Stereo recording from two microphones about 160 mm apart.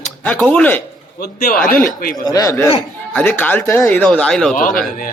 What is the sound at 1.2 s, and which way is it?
Speech, 70° left (ahead or behind).